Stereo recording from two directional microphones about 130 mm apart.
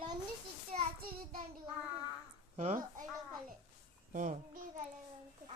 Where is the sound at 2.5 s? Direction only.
70° right (ahead or behind).